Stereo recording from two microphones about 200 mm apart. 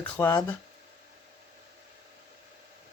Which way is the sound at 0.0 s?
10° left (ahead or behind).